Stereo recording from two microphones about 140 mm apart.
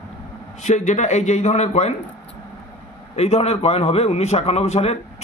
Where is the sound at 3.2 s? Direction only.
50° left (ahead or behind).